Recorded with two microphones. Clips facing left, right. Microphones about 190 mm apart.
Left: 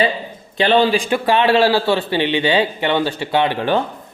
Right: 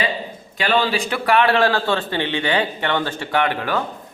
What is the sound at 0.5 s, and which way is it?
A man's voice, 25° left (ahead or behind).